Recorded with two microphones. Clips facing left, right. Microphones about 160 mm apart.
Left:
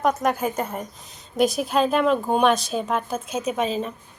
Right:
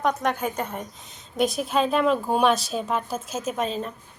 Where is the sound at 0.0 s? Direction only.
5° left (ahead or behind).